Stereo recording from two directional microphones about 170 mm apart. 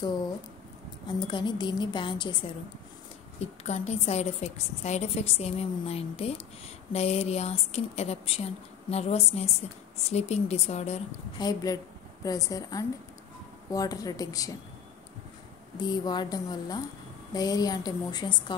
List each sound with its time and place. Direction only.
1.0 s a woman's voice: 25° left (ahead or behind)
3.3 s a woman's voice: 40° left (ahead or behind)
11.3 s a woman's voice: 20° left (ahead or behind)
15.8 s a woman's voice: 25° left (ahead or behind)